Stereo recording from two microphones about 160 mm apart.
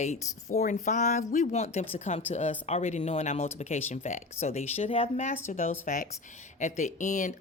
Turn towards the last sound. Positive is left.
turn(degrees=50)  # may be behind; listen again after turning